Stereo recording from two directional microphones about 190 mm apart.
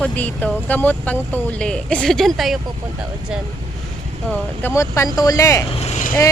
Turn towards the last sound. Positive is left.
turn(degrees=35)  # may be behind; listen again after turning